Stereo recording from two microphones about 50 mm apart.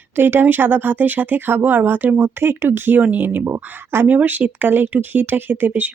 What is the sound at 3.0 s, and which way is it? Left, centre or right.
Speech, right.